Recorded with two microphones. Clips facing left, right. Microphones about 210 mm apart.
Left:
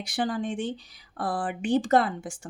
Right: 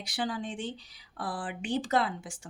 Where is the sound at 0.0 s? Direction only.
50° left (ahead or behind).